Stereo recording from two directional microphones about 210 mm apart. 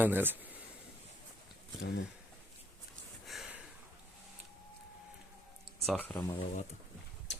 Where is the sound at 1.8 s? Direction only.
50° left (ahead or behind).